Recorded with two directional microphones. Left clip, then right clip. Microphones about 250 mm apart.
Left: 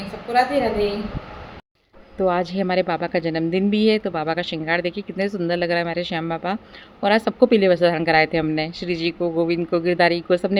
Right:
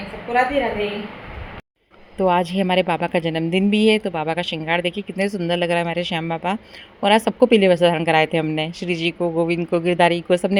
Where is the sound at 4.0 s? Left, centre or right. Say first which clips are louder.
Right 1 dB; right.